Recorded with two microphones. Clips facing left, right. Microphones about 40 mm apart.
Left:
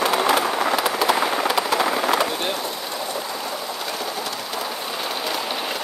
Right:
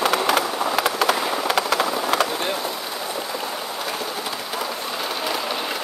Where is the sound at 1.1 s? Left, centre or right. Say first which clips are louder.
Left 3 dB; centre.